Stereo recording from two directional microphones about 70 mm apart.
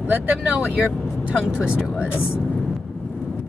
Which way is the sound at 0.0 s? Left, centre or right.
Right.